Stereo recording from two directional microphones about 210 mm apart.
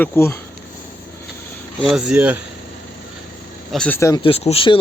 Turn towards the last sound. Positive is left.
turn(degrees=25)  # may be behind; listen again after turning